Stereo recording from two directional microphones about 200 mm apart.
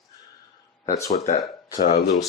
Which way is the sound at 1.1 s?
35° left (ahead or behind).